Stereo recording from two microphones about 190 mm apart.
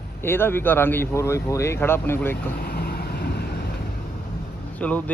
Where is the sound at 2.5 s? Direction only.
50° left (ahead or behind).